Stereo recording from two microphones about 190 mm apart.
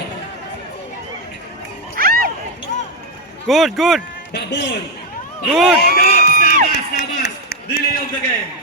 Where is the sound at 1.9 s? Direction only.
50° right (ahead or behind).